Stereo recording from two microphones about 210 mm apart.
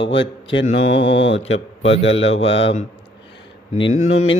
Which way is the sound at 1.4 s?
65° left (ahead or behind).